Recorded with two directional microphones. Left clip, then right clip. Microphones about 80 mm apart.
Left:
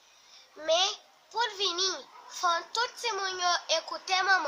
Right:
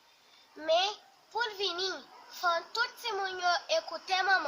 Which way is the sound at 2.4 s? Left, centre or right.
Left.